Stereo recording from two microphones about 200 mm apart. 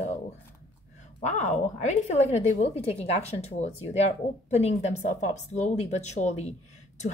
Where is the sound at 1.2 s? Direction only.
35° left (ahead or behind).